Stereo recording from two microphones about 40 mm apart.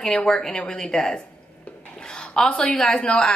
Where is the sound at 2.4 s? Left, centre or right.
Centre.